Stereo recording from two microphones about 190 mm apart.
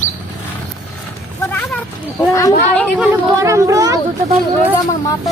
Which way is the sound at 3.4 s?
15° right (ahead or behind).